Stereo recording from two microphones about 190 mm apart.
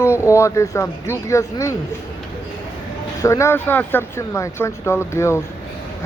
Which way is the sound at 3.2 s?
15° left (ahead or behind).